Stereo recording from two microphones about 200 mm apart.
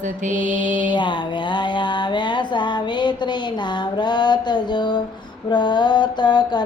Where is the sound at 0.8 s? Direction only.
25° left (ahead or behind).